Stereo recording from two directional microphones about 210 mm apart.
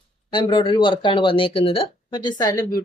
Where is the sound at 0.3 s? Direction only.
20° left (ahead or behind).